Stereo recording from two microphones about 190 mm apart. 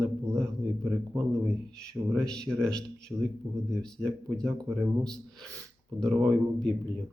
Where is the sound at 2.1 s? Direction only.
5° left (ahead or behind).